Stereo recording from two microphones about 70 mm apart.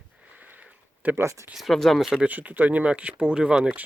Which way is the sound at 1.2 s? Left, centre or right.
Right.